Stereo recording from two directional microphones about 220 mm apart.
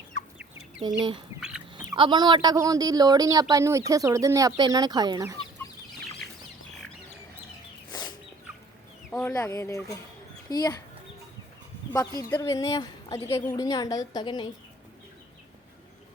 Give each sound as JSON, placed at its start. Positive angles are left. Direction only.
{"t": 0.8, "sound": "speech", "side_deg": -20}
{"t": 1.4, "sound": "fowl", "side_deg": -5}
{"t": 1.9, "sound": "speech", "side_deg": -20}
{"t": 7.9, "sound": "chicken", "side_deg": 20}
{"t": 9.1, "sound": "a woman's voice", "side_deg": 15}
{"t": 11.9, "sound": "a woman's voice", "side_deg": 15}